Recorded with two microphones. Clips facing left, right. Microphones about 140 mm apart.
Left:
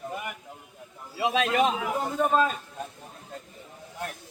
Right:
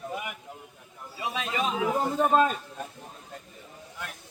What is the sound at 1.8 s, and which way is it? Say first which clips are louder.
Speech: right 2 dB; 20° right (ahead or behind).